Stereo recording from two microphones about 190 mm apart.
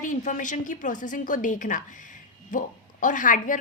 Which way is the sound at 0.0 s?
45° left (ahead or behind).